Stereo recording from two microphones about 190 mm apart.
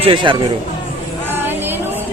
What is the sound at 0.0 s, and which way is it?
Speech, 25° right (ahead or behind).